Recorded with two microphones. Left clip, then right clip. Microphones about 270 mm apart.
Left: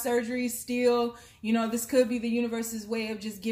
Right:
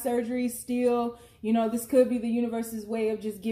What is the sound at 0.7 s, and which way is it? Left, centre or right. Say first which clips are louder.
Speech: left 1 dB; left.